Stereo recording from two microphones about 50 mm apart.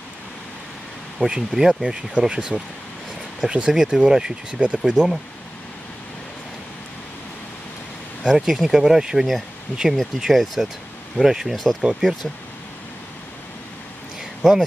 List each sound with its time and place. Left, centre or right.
1.2 s speech: centre
8.2 s speech: centre
9.7 s speech: left
10.1 s speech: centre